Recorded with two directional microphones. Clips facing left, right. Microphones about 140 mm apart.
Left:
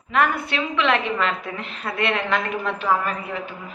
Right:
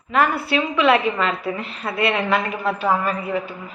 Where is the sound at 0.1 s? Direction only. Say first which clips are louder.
Right 2 dB; 5° right (ahead or behind).